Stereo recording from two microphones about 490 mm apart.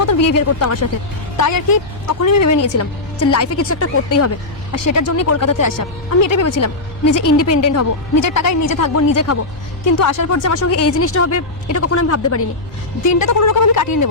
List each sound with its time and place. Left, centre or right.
0.0 s speech: left